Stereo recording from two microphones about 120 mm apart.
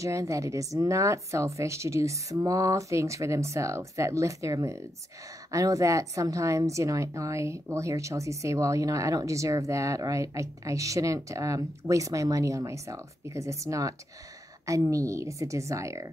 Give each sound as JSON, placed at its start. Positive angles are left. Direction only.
{"t": 0.0, "sound": "a woman's voice", "side_deg": -25}